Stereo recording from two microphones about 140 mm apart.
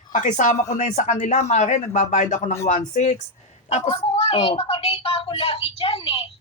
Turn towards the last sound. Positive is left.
turn(degrees=45)  # may be behind; listen again after turning